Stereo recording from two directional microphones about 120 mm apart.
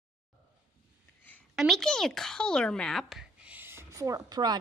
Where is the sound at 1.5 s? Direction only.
Centre (ahead or behind).